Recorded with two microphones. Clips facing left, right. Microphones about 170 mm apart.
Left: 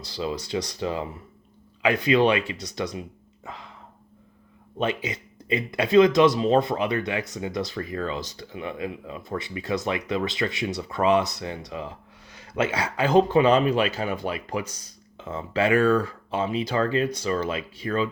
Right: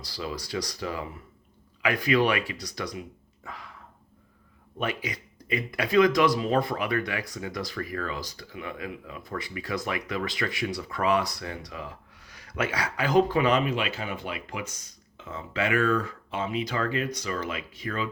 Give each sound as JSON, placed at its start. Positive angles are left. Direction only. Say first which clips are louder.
{"t": 0.0, "sound": "speech", "louder": "left 5 dB", "side_deg": 25}
{"t": 3.4, "sound": "a sound", "louder": "left 2 dB", "side_deg": 25}
{"t": 4.8, "sound": "speech", "louder": "left 4 dB", "side_deg": 25}